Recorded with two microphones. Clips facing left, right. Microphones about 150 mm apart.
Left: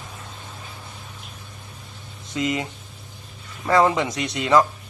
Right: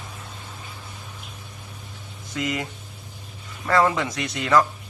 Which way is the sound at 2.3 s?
20° left (ahead or behind).